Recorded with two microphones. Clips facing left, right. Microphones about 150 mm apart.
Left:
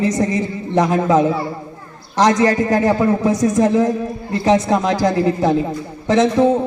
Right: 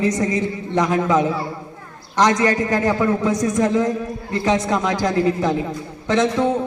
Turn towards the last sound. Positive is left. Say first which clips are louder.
# left 4 dB
turn(degrees=25)  # may be behind; listen again after turning